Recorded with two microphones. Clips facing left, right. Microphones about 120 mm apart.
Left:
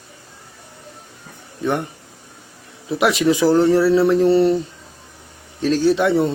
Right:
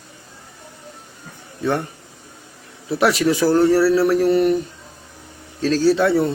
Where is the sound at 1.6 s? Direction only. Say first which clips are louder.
Even; 15° left (ahead or behind).